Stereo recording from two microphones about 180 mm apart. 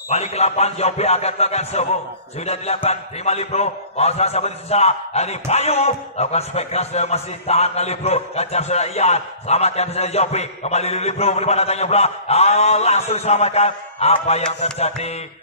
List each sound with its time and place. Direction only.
0.1 s a man's voice: 35° left (ahead or behind)